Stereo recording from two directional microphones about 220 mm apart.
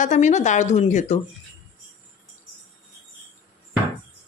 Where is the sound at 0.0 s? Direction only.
35° left (ahead or behind).